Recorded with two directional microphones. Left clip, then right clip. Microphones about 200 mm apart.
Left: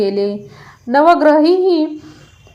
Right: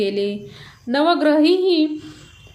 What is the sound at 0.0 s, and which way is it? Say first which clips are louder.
Speech: left 5 dB; centre (ahead or behind).